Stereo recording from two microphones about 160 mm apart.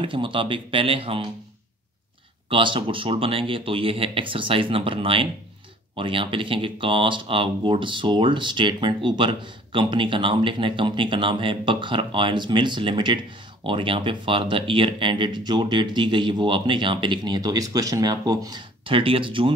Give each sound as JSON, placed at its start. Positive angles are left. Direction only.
{"t": 0.0, "sound": "speech", "side_deg": -30}
{"t": 2.5, "sound": "speech", "side_deg": -30}